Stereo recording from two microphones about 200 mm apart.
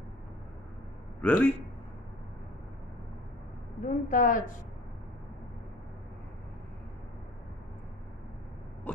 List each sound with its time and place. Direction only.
1.2 s a man's voice: 5° left (ahead or behind)
3.8 s a woman's voice: 40° left (ahead or behind)
8.9 s a sound: 10° left (ahead or behind)